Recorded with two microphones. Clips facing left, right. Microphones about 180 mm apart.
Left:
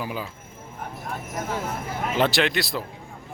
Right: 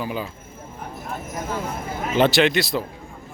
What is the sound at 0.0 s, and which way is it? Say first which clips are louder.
Speech: right 3 dB; 5° left (ahead or behind).